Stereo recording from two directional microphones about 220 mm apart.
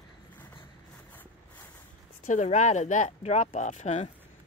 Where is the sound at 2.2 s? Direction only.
35° left (ahead or behind).